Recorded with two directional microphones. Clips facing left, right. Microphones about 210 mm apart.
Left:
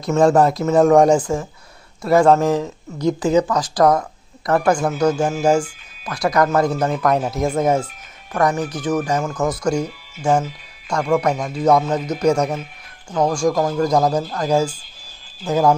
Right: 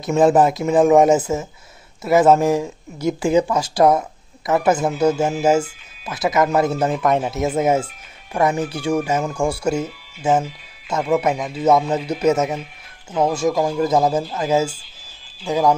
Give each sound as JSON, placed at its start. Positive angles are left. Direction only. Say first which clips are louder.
{"t": 0.1, "sound": "speech", "louder": "even", "side_deg": -15}
{"t": 0.7, "sound": "speech", "louder": "even", "side_deg": -5}
{"t": 8.5, "sound": "speech", "louder": "even", "side_deg": -30}
{"t": 8.8, "sound": "speech", "louder": "even", "side_deg": -10}